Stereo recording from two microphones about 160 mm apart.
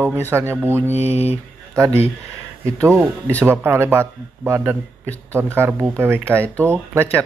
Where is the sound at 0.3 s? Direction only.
15° right (ahead or behind).